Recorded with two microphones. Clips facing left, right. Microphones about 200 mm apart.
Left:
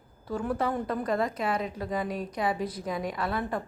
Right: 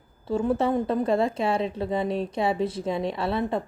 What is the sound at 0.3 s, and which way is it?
Speech, 25° right (ahead or behind).